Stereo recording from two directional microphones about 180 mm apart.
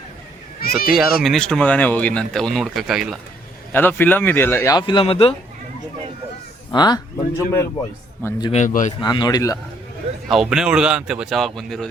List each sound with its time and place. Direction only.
0.6 s a sound: 55° left (ahead or behind)
1.2 s speech: centre (ahead or behind)
3.7 s speech: 10° left (ahead or behind); by 5.3 s 30° left (ahead or behind)
6.7 s speech: 25° left (ahead or behind)
8.5 s a man's voice: 45° left (ahead or behind)
9.0 s speech: 25° left (ahead or behind)
10.2 s speech: centre (ahead or behind)